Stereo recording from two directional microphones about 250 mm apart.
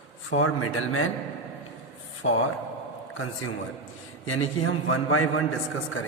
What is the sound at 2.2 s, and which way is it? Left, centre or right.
Speech, left.